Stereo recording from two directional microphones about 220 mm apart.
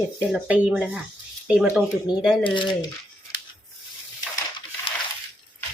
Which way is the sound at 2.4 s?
20° left (ahead or behind).